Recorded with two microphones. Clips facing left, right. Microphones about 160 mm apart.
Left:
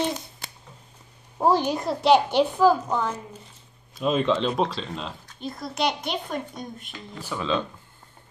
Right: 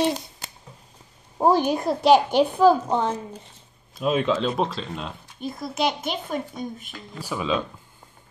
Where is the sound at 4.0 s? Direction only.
5° right (ahead or behind).